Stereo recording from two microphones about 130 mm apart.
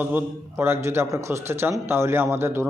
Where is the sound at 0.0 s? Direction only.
15° right (ahead or behind).